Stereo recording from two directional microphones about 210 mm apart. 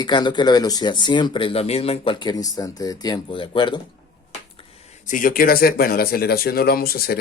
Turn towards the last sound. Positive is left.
turn(degrees=45)  # may be behind; listen again after turning